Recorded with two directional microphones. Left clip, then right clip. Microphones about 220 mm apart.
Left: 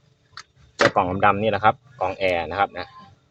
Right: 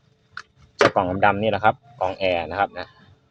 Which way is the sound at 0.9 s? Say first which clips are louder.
Even; centre (ahead or behind).